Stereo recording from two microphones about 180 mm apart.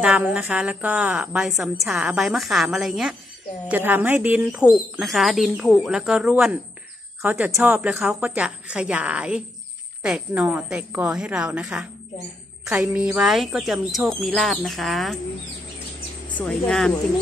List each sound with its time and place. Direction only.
0.0 s a woman's voice: 5° right (ahead or behind)
16.3 s a woman's voice: 5° left (ahead or behind)